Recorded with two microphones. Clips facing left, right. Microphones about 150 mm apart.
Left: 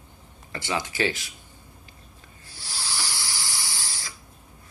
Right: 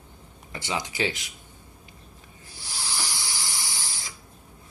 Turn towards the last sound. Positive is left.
turn(degrees=-20)  # may be behind; listen again after turning